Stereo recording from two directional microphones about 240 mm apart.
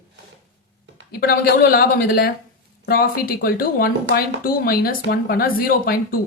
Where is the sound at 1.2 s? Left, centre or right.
Left.